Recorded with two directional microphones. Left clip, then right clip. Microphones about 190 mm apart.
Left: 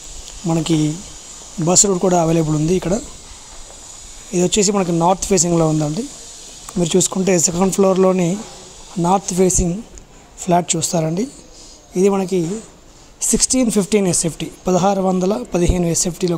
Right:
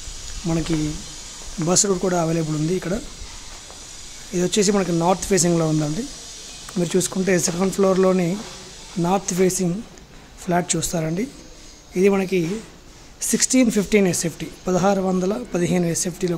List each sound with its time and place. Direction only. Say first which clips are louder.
0.5 s speech: left 6 dB; 25° left (ahead or behind)
4.3 s a woman's voice: left 3 dB; 20° left (ahead or behind)